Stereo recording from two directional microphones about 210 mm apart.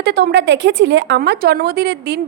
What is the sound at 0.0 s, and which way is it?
A woman's voice, 50° right (ahead or behind).